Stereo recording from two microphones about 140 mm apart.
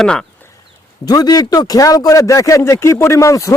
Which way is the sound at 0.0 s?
5° left (ahead or behind).